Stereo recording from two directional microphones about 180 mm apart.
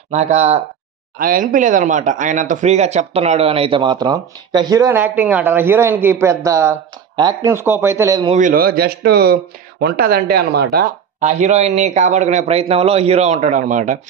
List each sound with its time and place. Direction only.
0.1 s speech: 40° right (ahead or behind)
1.1 s speech: 50° right (ahead or behind); by 8.3 s 15° right (ahead or behind)
8.3 s speech: 45° right (ahead or behind); by 10.8 s 60° right (ahead or behind)
11.1 s speech: 40° right (ahead or behind)